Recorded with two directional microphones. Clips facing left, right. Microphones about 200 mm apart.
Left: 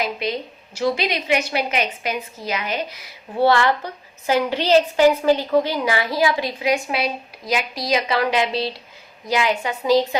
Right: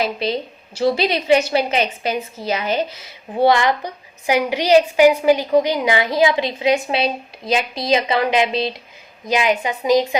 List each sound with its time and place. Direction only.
0.0 s a woman's voice: 30° right (ahead or behind)